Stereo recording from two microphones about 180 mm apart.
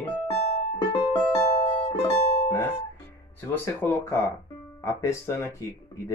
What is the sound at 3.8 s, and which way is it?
Speech, 15° left (ahead or behind).